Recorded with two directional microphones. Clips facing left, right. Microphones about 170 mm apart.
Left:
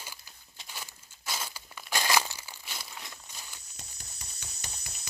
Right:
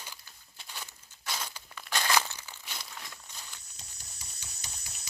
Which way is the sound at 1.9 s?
10° left (ahead or behind).